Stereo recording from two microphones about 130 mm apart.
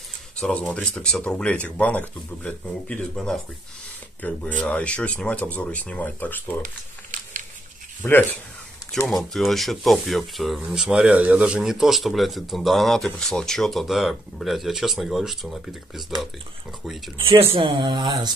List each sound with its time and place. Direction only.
0.4 s speech: 5° left (ahead or behind)
6.6 s crumpling: 85° right
8.0 s speech: 15° left (ahead or behind)
9.0 s speech: centre (ahead or behind)
17.4 s speech: 45° right (ahead or behind)